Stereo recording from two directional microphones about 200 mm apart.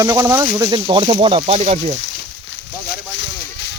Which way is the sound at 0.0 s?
15° right (ahead or behind).